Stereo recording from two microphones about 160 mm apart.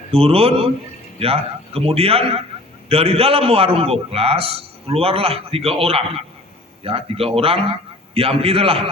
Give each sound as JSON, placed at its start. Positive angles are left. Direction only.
{"t": 0.1, "sound": "a man's voice", "side_deg": -40}